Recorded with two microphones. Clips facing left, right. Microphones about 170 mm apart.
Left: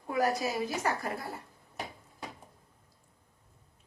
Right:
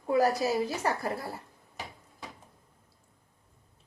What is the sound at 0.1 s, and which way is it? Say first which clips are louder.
A woman's voice: right 4 dB; 30° right (ahead or behind).